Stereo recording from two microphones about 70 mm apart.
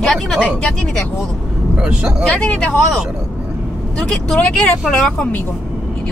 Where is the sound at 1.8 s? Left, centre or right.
Centre.